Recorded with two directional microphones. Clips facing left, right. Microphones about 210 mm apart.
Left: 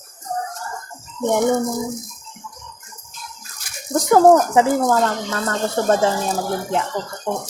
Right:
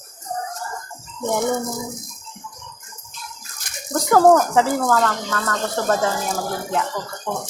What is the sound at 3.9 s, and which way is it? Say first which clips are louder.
Speech: left 2 dB; 15° left (ahead or behind).